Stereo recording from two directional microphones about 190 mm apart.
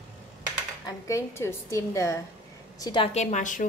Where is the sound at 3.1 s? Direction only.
40° left (ahead or behind).